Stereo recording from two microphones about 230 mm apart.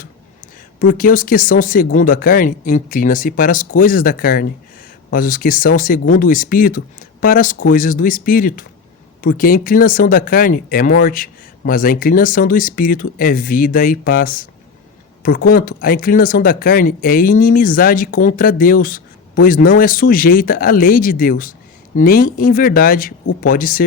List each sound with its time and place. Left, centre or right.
0.0 s speech: left